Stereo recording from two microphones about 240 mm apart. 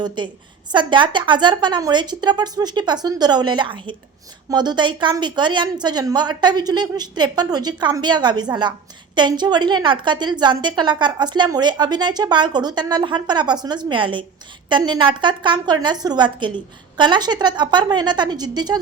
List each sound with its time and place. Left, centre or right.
0.2 s a woman's voice: centre